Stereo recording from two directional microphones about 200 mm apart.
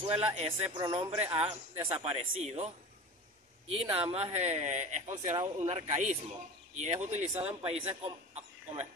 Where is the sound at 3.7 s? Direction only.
30° right (ahead or behind).